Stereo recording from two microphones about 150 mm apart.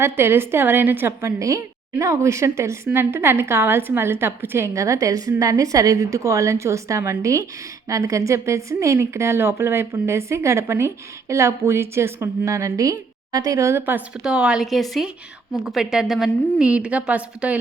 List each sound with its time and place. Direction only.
0.0 s a woman's voice: 15° right (ahead or behind)